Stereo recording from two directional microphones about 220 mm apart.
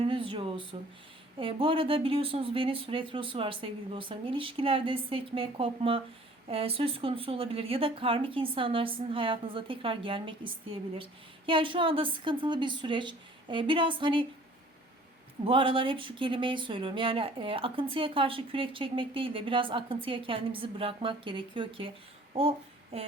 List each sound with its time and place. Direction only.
0.0 s a sound: 25° right (ahead or behind)
1.4 s speech: 25° right (ahead or behind)
15.4 s speech: 25° right (ahead or behind)